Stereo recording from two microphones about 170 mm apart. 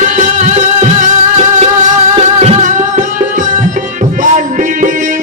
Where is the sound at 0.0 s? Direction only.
50° right (ahead or behind).